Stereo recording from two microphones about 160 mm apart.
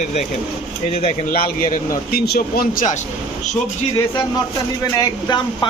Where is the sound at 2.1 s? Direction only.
75° left (ahead or behind).